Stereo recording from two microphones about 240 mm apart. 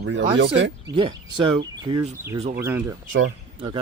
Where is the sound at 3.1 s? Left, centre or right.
Right.